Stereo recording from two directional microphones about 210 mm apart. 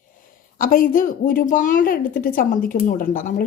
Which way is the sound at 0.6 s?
40° left (ahead or behind).